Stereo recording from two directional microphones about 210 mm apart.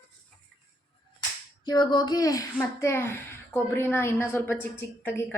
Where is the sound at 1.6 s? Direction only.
20° left (ahead or behind).